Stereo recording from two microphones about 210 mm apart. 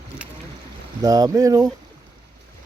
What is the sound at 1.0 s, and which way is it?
Speech, 15° right (ahead or behind).